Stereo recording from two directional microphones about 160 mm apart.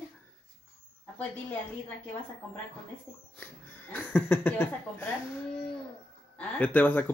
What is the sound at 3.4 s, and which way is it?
Speech, 10° left (ahead or behind).